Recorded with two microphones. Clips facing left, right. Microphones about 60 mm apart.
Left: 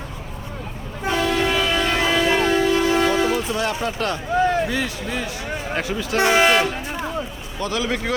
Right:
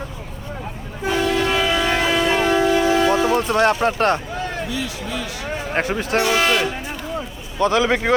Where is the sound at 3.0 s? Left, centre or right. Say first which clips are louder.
Right 2 dB; right.